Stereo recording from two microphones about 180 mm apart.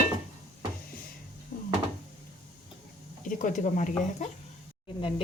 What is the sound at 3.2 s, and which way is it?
Speech, 45° left (ahead or behind).